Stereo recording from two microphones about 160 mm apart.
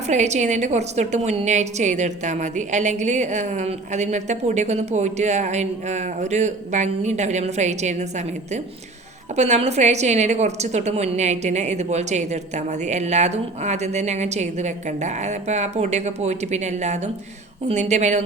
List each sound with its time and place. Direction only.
0.1 s a woman's voice: 45° right (ahead or behind)